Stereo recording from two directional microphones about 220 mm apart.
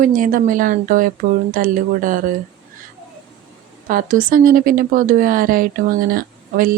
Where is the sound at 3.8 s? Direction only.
40° right (ahead or behind).